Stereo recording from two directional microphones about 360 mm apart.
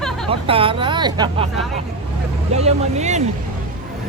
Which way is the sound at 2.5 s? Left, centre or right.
Centre.